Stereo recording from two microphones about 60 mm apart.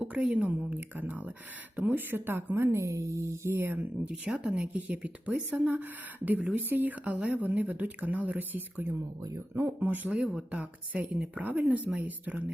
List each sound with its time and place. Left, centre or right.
0.0 s a woman's voice: right
2.7 s a sound: right
3.5 s speech: right
4.0 s speech: centre